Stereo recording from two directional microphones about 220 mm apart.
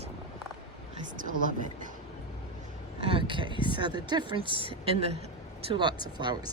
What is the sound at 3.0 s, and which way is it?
Speech, 25° right (ahead or behind).